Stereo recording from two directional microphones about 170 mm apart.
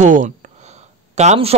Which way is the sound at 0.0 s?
50° right (ahead or behind).